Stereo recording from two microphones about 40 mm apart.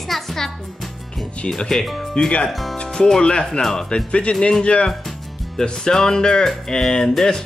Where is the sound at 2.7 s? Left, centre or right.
Left.